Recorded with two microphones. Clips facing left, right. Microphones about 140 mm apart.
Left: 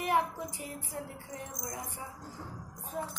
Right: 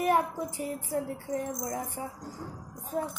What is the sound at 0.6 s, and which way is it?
Music, 40° right (ahead or behind).